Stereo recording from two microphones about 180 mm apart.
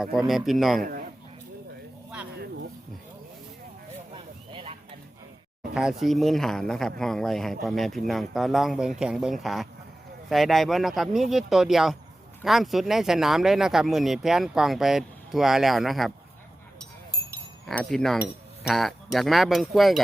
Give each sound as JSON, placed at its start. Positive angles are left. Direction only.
{"t": 0.0, "sound": "speech", "side_deg": 0}
{"t": 4.1, "sound": "a sound", "side_deg": -30}
{"t": 5.7, "sound": "speech", "side_deg": -5}
{"t": 17.7, "sound": "speech", "side_deg": 5}